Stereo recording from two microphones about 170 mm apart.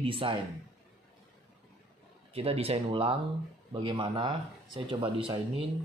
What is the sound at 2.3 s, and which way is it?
Speech, 35° right (ahead or behind).